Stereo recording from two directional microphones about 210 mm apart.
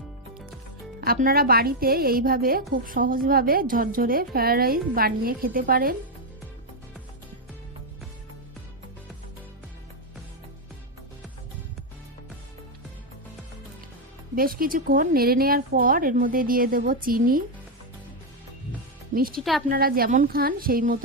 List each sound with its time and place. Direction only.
1.0 s a woman's voice: 45° right (ahead or behind)
14.3 s a woman's voice: 45° right (ahead or behind)
19.1 s a woman's voice: 45° right (ahead or behind)
19.4 s a woman's voice: centre (ahead or behind)
19.6 s a woman's voice: 45° right (ahead or behind)